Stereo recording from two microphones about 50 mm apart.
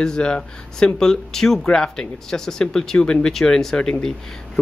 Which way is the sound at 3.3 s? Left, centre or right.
Centre.